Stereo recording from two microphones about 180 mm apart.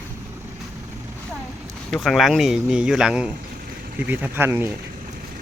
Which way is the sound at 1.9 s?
Centre (ahead or behind).